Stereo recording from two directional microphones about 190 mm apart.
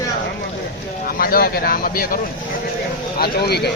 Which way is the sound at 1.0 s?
50° left (ahead or behind).